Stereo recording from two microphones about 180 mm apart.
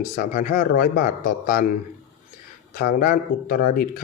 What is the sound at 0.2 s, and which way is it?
Speech, 45° left (ahead or behind).